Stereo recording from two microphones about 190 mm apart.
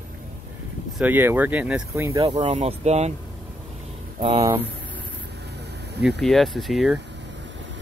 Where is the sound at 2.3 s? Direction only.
35° right (ahead or behind).